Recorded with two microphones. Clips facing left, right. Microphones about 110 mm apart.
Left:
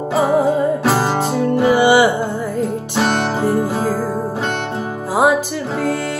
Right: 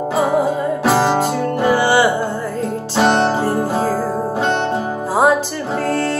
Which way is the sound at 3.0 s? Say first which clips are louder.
Right 4 dB; 25° right (ahead or behind).